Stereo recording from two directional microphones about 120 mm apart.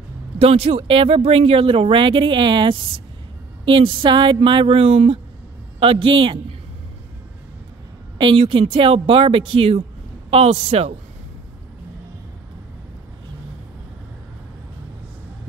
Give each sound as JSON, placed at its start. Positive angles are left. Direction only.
{"t": 0.4, "sound": "speech", "side_deg": -60}
{"t": 8.2, "sound": "a man's voice", "side_deg": -45}